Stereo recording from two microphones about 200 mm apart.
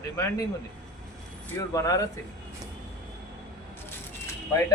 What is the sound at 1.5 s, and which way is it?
Speech, 15° left (ahead or behind).